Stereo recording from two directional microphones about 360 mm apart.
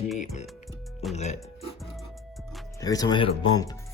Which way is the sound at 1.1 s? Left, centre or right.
Centre.